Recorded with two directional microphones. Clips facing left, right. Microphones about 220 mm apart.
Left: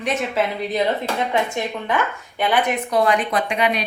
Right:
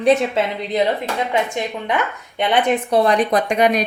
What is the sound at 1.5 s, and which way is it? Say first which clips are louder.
A woman's voice: right 1 dB; 20° right (ahead or behind).